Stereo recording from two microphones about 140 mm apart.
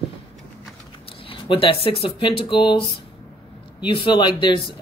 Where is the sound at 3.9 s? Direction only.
35° left (ahead or behind).